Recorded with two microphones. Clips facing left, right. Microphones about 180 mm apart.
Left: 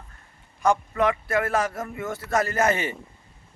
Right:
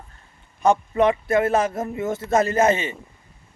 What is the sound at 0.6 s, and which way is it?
A man's voice, 20° right (ahead or behind).